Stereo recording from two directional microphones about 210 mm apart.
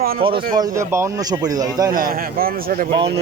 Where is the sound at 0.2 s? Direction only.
20° right (ahead or behind).